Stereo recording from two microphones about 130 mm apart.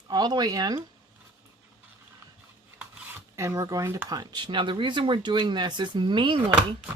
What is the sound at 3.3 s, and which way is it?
Speech, 25° right (ahead or behind).